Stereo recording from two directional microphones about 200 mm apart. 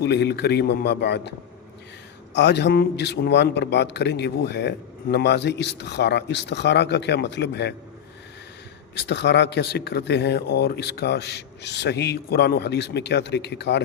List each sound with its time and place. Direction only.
0.0 s speech: 55° left (ahead or behind)
2.3 s speech: 60° left (ahead or behind)
9.0 s speech: 60° left (ahead or behind)